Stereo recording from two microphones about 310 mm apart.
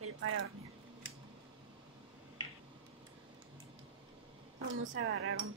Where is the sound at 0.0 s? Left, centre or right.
Right.